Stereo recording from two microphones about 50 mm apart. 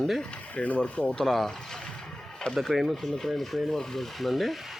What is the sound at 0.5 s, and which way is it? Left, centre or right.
Speech, left.